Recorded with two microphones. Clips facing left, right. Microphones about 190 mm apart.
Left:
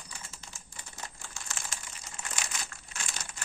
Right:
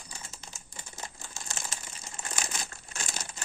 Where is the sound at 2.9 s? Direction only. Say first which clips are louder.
Right 3 dB; 35° right (ahead or behind).